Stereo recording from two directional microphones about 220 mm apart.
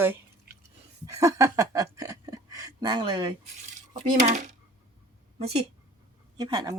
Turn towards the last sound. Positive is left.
turn(degrees=-20)  # may be behind; listen again after turning